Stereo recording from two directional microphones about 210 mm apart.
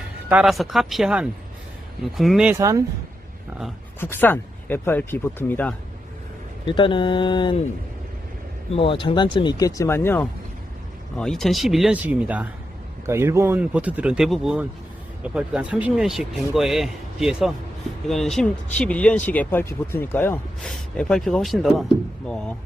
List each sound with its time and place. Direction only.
0.3 s speech: 5° right (ahead or behind)
2.6 s speech: 15° right (ahead or behind)
4.0 s speech: 10° left (ahead or behind)
6.7 s speech: 25° left (ahead or behind)
8.7 s speech: 25° left (ahead or behind); by 22.5 s 5° left (ahead or behind)